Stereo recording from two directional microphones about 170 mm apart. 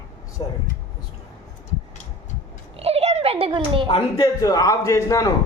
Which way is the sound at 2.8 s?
35° right (ahead or behind).